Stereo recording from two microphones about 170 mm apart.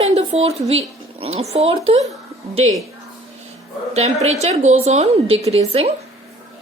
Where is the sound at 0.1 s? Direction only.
40° right (ahead or behind).